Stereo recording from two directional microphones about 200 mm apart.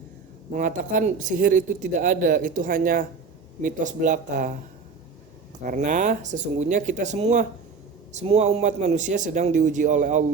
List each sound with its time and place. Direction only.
0.5 s a man's voice: 40° right (ahead or behind)
5.6 s a man's voice: 40° right (ahead or behind)